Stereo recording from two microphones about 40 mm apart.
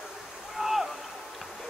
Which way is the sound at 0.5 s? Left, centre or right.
Centre.